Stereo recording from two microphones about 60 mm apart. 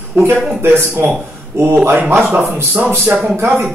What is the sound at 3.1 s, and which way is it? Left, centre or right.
Speech, right.